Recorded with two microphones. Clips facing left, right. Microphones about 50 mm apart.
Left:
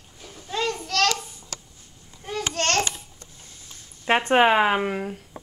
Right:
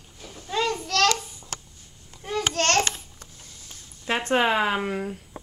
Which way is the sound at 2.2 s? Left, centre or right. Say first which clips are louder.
Right 2 dB; centre.